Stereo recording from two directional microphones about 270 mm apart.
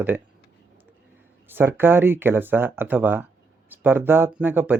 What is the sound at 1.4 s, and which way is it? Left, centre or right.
Speech, centre.